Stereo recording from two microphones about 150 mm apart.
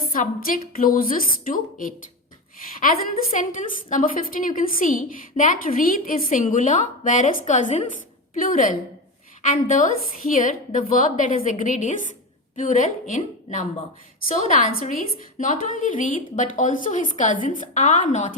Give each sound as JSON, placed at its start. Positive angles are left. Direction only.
{"t": 0.1, "sound": "a woman's voice", "side_deg": 65}
{"t": 3.3, "sound": "a woman's voice", "side_deg": 60}